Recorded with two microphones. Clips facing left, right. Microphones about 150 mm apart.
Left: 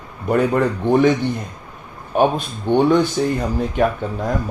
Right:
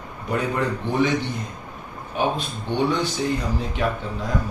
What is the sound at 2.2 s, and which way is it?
Speech, 50° left (ahead or behind).